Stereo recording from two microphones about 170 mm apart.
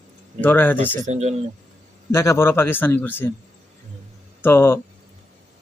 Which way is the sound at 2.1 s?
15° left (ahead or behind).